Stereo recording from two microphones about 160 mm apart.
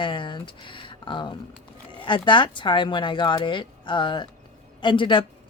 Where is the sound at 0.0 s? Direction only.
30° left (ahead or behind).